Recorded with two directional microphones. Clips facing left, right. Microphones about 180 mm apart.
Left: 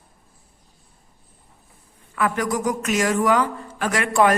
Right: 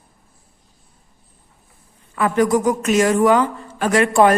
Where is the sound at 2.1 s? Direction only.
25° right (ahead or behind).